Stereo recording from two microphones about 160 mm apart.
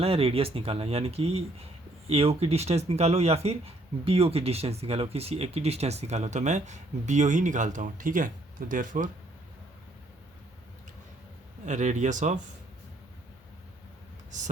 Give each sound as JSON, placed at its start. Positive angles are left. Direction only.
{"t": 0.0, "sound": "speech", "side_deg": -35}
{"t": 11.6, "sound": "speech", "side_deg": -50}